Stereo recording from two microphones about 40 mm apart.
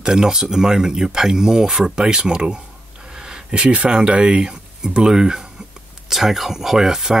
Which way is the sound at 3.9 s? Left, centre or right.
Right.